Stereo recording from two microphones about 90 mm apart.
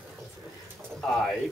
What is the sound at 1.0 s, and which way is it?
Speech, 5° left (ahead or behind).